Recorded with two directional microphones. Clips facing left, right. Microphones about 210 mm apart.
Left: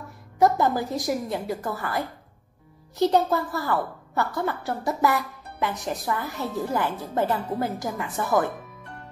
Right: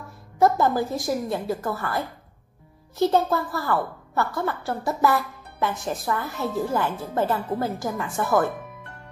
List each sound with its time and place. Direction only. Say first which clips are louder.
0.4 s a woman's voice: right 1 dB; 20° left (ahead or behind)